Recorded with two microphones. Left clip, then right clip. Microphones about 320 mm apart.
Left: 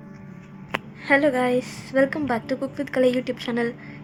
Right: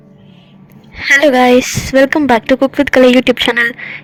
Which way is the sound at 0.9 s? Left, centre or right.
Right.